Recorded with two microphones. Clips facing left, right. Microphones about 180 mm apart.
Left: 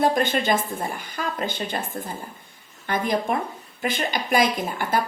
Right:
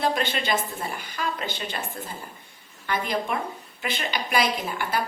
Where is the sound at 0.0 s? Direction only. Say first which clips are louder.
Left 5 dB; 50° left (ahead or behind).